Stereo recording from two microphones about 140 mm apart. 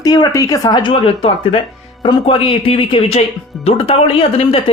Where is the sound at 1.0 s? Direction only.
45° left (ahead or behind).